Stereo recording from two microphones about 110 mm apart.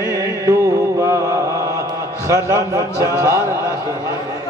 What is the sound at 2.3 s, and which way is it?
A man's voice, 30° right (ahead or behind).